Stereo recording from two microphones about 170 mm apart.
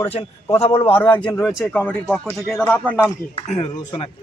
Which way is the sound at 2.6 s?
10° left (ahead or behind).